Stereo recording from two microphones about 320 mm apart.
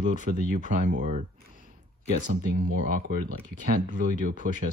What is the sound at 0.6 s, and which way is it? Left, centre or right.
Speech, right.